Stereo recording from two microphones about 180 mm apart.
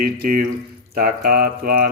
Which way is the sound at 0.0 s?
55° right (ahead or behind).